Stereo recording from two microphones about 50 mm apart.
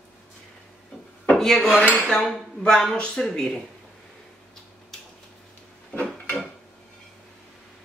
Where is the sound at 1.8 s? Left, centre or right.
Left.